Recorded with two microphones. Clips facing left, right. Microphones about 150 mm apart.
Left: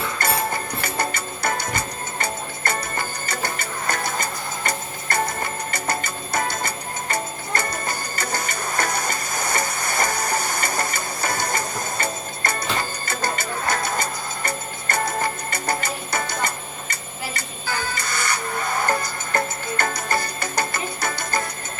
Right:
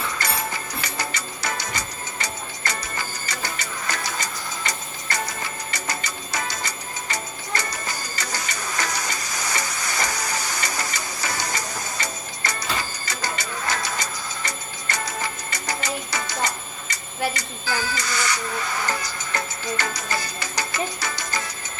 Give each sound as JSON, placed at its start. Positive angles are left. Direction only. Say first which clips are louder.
{"t": 0.2, "sound": "music", "louder": "left 5 dB", "side_deg": 55}